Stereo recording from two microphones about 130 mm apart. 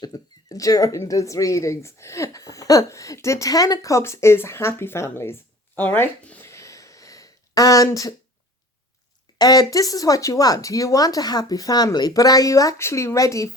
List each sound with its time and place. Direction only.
0.0 s speech: 30° left (ahead or behind)
6.5 s a sound: 25° left (ahead or behind)
9.4 s speech: 30° left (ahead or behind)